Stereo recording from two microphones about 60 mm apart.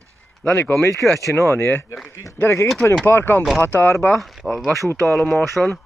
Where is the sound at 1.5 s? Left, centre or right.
Left.